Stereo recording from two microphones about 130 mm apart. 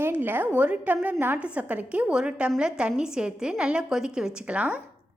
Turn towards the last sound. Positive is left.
turn(degrees=-10)  # may be behind; listen again after turning